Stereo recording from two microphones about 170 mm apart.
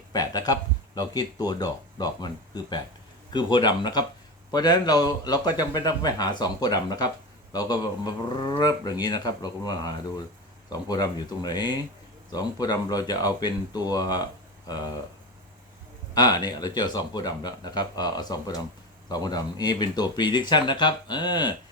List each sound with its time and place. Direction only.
0.1 s speech: 25° left (ahead or behind)
16.1 s speech: 25° left (ahead or behind)